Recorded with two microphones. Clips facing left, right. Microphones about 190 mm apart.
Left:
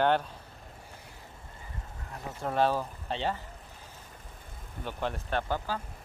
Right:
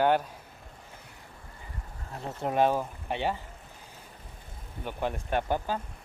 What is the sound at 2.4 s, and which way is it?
Speech, 15° right (ahead or behind).